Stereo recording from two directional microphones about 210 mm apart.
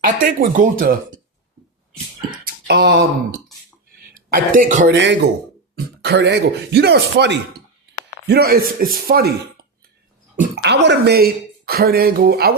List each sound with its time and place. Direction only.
0.0 s speech: 40° right (ahead or behind)
2.5 s speech: 50° right (ahead or behind)
4.3 s speech: 40° right (ahead or behind)
4.9 s speech: 55° right (ahead or behind)